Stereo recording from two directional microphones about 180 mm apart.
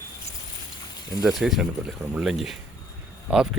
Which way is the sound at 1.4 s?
Centre (ahead or behind).